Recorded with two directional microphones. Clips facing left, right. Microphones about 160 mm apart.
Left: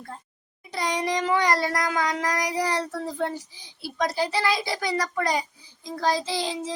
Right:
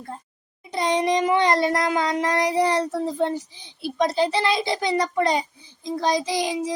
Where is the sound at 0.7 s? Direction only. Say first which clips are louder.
Right 5 dB; 20° right (ahead or behind).